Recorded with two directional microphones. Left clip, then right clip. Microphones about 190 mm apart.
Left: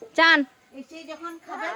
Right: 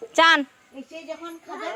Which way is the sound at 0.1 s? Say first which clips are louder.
Right 1 dB; 5° left (ahead or behind).